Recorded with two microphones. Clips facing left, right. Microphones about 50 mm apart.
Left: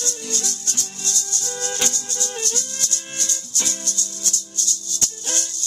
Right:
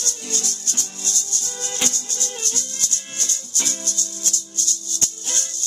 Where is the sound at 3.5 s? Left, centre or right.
Right.